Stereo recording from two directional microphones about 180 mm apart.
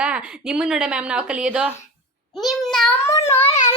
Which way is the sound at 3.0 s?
15° left (ahead or behind).